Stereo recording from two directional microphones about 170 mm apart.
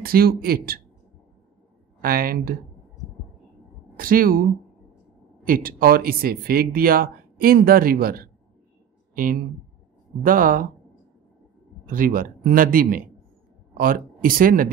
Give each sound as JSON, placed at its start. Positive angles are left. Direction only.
{"t": 0.0, "sound": "speech", "side_deg": -60}
{"t": 2.0, "sound": "speech", "side_deg": -55}
{"t": 3.9, "sound": "a woman's voice", "side_deg": -55}
{"t": 11.8, "sound": "speech", "side_deg": -50}